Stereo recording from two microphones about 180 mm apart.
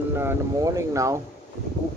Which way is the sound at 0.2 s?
15° right (ahead or behind).